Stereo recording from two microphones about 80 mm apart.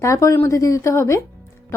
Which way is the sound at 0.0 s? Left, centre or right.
Left.